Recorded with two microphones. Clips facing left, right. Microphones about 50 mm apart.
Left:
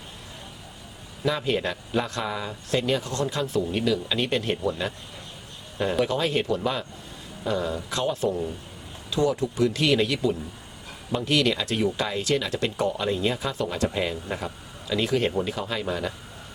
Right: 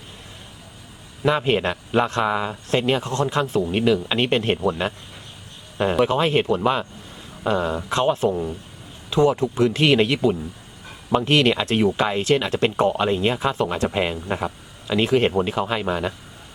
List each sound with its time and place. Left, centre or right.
1.2 s speech: right
8.3 s speech: right
9.0 s speech: right
11.3 s speech: right